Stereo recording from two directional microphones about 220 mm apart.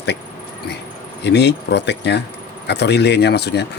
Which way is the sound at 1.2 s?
50° left (ahead or behind).